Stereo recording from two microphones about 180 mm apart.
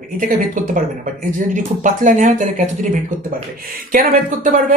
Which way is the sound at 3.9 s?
50° right (ahead or behind).